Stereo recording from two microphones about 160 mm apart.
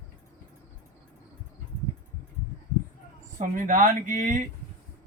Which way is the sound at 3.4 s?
55° right (ahead or behind).